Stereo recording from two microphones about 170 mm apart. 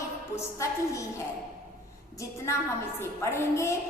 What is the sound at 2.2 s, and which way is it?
A woman's voice, 15° left (ahead or behind).